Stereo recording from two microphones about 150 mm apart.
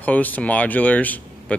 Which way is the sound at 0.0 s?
10° left (ahead or behind).